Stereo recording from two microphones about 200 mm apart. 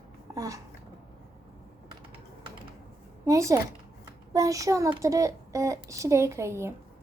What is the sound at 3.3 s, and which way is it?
A child's voice, 15° right (ahead or behind).